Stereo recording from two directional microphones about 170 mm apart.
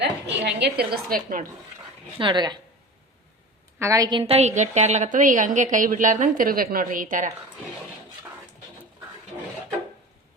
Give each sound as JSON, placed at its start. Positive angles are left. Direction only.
{"t": 0.4, "sound": "a woman's voice", "side_deg": -75}
{"t": 2.1, "sound": "a woman's voice", "side_deg": -30}
{"t": 3.8, "sound": "a woman's voice", "side_deg": -20}
{"t": 4.2, "sound": "a woman's voice", "side_deg": -35}